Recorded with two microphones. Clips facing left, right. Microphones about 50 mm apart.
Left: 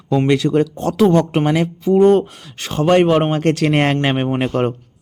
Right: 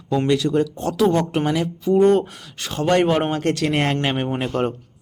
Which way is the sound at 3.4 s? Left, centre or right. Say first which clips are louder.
Left 5 dB; left.